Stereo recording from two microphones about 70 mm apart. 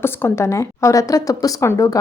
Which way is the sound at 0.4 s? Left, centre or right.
Left.